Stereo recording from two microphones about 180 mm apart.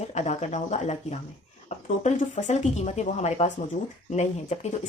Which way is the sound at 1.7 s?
40° left (ahead or behind).